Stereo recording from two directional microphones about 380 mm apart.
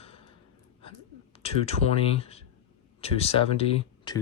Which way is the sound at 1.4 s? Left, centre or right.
Centre.